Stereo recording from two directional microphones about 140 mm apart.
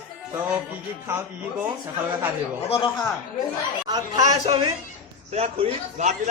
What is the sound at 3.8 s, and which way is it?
Speech, 30° right (ahead or behind).